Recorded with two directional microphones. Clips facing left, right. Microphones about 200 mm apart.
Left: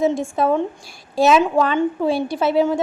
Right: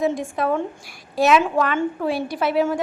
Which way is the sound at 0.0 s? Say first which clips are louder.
Left 3 dB; 25° left (ahead or behind).